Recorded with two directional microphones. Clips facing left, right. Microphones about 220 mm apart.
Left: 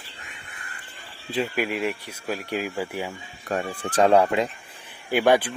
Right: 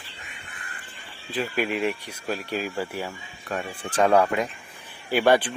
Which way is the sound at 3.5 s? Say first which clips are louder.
Left 4 dB; 40° left (ahead or behind).